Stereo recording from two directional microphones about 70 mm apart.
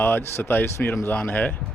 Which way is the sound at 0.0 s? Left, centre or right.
Left.